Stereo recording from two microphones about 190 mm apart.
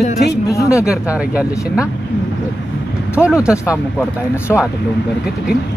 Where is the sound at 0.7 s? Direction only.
5° right (ahead or behind).